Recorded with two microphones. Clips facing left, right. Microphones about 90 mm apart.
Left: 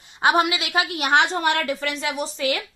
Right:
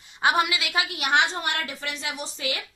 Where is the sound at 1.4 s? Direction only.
65° left (ahead or behind).